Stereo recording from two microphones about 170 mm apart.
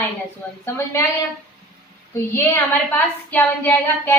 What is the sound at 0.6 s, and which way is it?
Speech, 15° left (ahead or behind).